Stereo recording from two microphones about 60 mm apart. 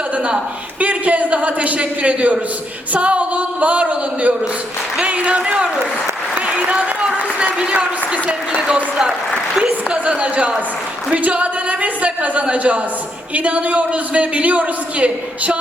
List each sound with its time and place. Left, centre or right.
0.8 s a man's voice: right
6.6 s applause: right
7.1 s a man's voice: centre